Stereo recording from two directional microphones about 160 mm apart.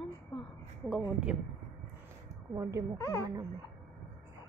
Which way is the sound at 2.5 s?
20° right (ahead or behind).